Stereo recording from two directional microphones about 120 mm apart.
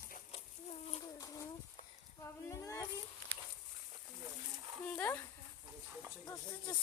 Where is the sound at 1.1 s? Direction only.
30° left (ahead or behind).